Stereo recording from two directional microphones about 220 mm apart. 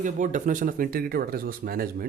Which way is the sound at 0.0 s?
35° right (ahead or behind).